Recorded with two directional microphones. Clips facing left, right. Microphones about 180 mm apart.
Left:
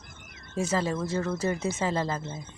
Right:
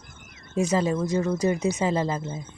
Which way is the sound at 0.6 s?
15° right (ahead or behind).